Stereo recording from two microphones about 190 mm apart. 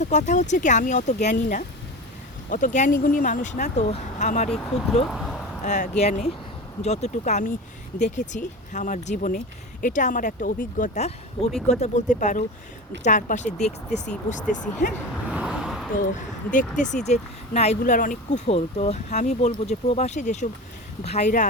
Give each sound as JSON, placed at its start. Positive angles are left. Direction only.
{"t": 0.0, "sound": "speech", "side_deg": 40}
{"t": 5.1, "sound": "a sound", "side_deg": 0}
{"t": 5.6, "sound": "speech", "side_deg": 40}
{"t": 15.3, "sound": "vehicle", "side_deg": -5}
{"t": 16.0, "sound": "speech", "side_deg": 45}